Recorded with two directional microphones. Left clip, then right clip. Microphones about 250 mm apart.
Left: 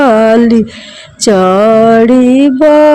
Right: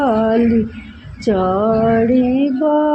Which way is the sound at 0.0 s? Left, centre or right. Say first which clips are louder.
Left 9 dB; left.